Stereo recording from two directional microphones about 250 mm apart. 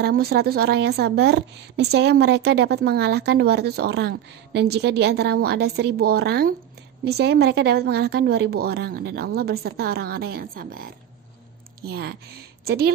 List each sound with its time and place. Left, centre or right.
0.0 s a woman's voice: right